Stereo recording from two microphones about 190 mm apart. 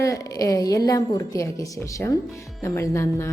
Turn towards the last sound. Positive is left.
turn(degrees=15)  # may be behind; listen again after turning